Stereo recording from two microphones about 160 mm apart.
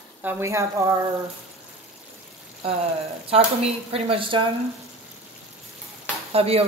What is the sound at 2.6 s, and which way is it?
A woman's voice, 40° right (ahead or behind).